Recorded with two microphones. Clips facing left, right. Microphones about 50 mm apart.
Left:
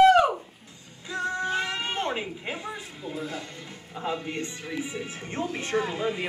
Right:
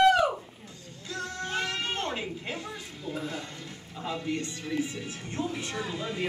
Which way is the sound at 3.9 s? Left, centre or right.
Left.